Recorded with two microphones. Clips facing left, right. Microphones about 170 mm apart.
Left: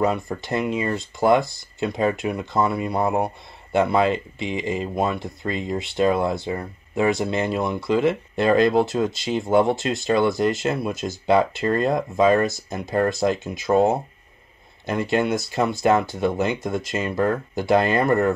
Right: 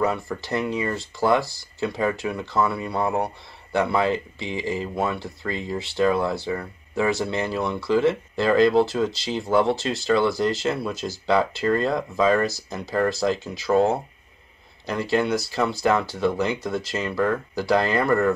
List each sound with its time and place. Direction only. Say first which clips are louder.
0.0 s speech: left 2 dB; 20° left (ahead or behind)